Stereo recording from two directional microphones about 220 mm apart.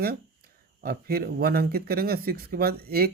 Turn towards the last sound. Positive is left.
turn(degrees=-45)  # may be behind; listen again after turning